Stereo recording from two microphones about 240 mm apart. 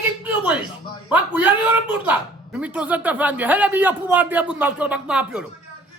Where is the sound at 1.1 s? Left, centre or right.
Centre.